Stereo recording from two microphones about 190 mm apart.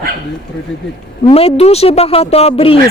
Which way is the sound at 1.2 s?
30° left (ahead or behind).